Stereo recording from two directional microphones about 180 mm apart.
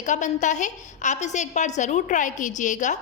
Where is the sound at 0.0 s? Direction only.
45° left (ahead or behind).